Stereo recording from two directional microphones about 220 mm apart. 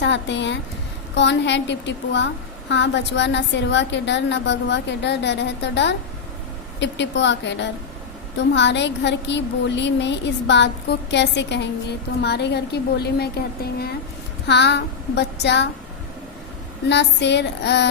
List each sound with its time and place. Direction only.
0.0 s a woman's voice: 55° left (ahead or behind)
16.9 s a woman's voice: 50° left (ahead or behind)